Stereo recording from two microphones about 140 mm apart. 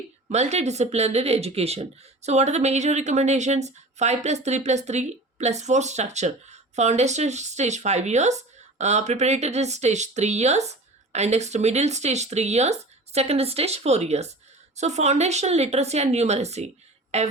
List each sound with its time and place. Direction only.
0.3 s speech: 55° right (ahead or behind)